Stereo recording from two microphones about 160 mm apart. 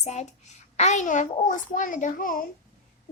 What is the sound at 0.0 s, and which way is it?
A child's voice, 45° left (ahead or behind).